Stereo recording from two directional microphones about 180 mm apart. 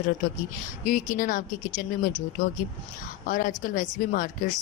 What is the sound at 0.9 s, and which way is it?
Speech, 50° left (ahead or behind).